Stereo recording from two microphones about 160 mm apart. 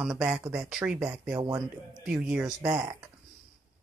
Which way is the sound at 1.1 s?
20° right (ahead or behind).